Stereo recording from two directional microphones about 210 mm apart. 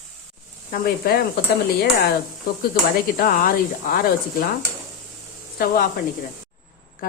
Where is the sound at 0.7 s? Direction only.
40° left (ahead or behind).